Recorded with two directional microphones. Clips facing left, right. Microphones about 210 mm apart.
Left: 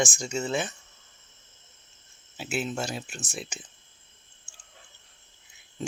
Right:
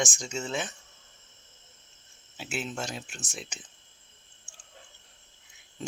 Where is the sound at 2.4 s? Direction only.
5° left (ahead or behind).